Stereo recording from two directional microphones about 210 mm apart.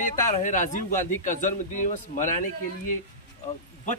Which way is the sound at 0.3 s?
35° left (ahead or behind).